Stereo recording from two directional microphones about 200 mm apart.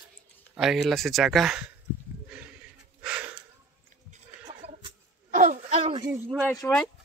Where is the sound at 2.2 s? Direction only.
5° right (ahead or behind).